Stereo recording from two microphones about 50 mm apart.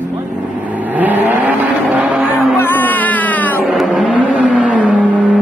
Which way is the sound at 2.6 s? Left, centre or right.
Left.